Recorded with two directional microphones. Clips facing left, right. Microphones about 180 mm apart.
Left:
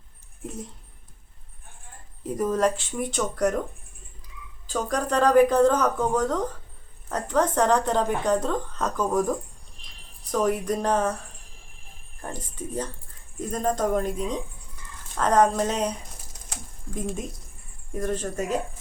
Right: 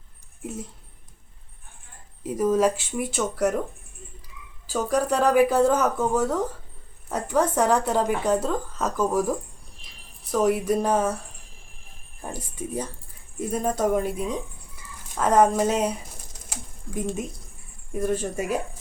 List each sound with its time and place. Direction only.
2.2 s speech: centre (ahead or behind)
4.6 s a woman's voice: 5° right (ahead or behind)
10.3 s a woman's voice: 5° right (ahead or behind)
12.2 s a woman's voice: 10° right (ahead or behind)
16.5 s a sound: 5° right (ahead or behind)
17.9 s a woman's voice: 10° right (ahead or behind)